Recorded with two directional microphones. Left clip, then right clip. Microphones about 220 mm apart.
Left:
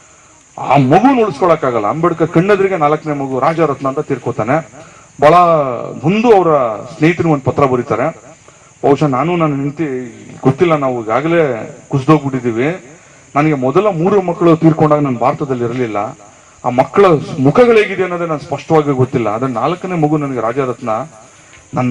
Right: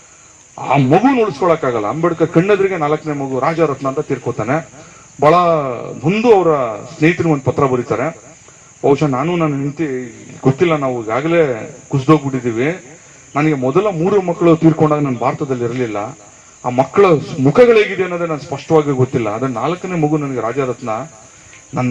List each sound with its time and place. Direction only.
0.6 s a man's voice: 30° left (ahead or behind)